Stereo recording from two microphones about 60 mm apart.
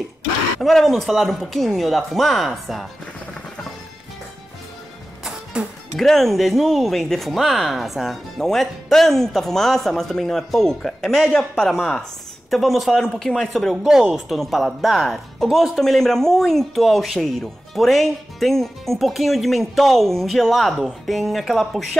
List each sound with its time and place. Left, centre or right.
0.6 s speech: centre
5.2 s music: centre
5.9 s speech: centre